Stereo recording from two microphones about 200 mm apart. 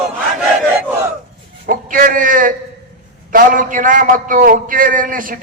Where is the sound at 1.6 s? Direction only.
45° right (ahead or behind).